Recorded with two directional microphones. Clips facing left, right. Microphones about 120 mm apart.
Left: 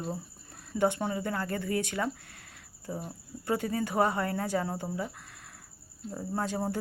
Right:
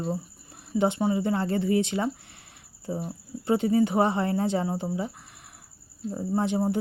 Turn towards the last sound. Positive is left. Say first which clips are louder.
# right 6 dB
turn(degrees=-20)  # may be behind; listen again after turning